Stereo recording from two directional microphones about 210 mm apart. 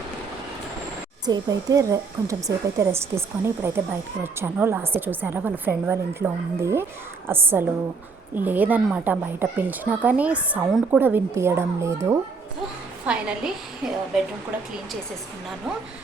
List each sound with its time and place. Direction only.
1.3 s speech: 15° right (ahead or behind)
13.1 s a woman's voice: 5° right (ahead or behind)